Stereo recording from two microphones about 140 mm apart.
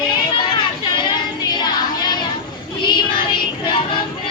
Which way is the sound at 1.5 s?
30° left (ahead or behind).